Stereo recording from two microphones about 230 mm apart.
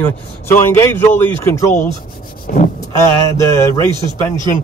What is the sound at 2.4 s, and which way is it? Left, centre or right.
Vehicle, left.